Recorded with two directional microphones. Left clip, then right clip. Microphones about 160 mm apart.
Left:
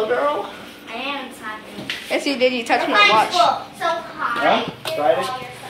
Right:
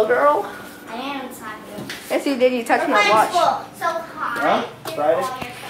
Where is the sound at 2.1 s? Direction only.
15° right (ahead or behind).